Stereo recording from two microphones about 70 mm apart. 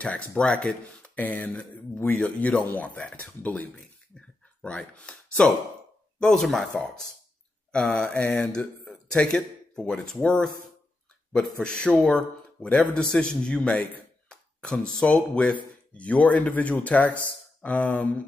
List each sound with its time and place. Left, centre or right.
0.0 s speech: centre
1.1 s speech: left; by 6.7 s centre
7.7 s a man's voice: centre